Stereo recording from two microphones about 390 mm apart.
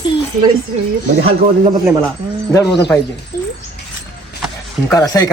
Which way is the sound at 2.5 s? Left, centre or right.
Centre.